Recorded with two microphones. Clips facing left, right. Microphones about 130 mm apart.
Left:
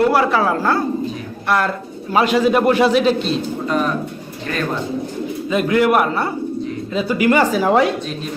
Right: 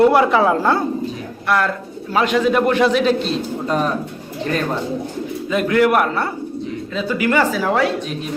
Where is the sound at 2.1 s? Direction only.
5° left (ahead or behind).